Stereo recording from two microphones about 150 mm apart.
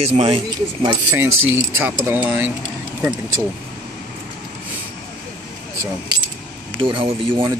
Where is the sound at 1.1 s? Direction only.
15° right (ahead or behind).